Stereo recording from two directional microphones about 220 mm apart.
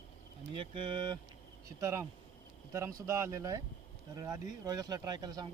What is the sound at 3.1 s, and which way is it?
Speech, 15° right (ahead or behind).